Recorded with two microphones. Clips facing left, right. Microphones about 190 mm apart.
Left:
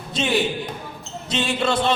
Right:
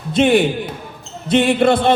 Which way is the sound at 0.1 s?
55° right (ahead or behind).